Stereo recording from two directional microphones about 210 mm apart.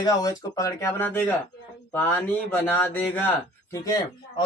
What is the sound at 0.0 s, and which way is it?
Speech, 20° left (ahead or behind).